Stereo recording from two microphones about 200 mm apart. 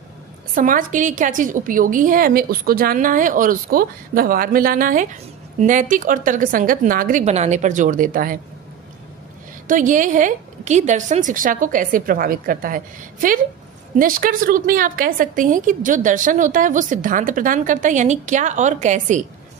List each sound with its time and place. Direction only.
0.6 s a woman's voice: 40° right (ahead or behind)
9.7 s a woman's voice: 40° right (ahead or behind)